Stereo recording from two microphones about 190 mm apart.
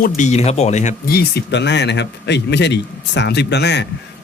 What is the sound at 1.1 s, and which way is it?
A man's voice, 60° left (ahead or behind).